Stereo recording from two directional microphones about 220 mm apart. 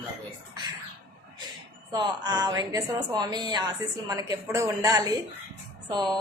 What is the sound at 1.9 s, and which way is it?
A woman's voice, 15° right (ahead or behind).